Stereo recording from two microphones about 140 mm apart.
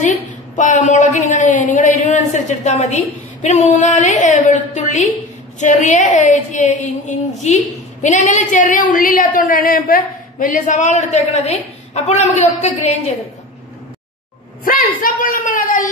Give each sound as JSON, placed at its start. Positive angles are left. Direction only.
{"t": 0.6, "sound": "a woman's voice", "side_deg": 60}
{"t": 14.6, "sound": "a man's voice", "side_deg": 90}